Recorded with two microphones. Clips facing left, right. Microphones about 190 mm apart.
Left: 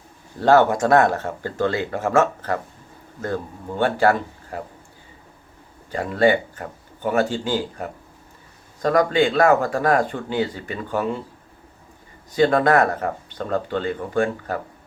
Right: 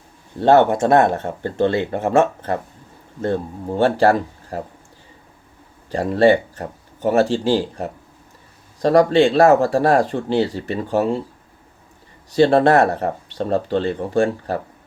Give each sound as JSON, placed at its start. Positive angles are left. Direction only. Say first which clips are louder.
{"t": 0.3, "sound": "speech", "louder": "right 2 dB", "side_deg": -25}
{"t": 5.9, "sound": "speech", "louder": "right 4 dB", "side_deg": -35}
{"t": 12.4, "sound": "speech", "louder": "right 3 dB", "side_deg": -30}